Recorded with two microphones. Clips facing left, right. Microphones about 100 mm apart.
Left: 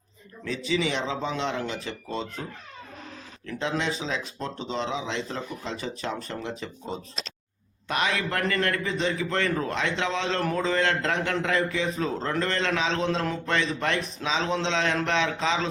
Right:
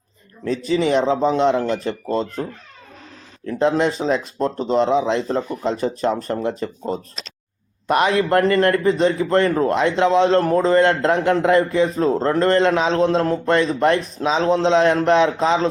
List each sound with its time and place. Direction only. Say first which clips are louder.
0.4 s a man's voice: right 8 dB; 40° right (ahead or behind)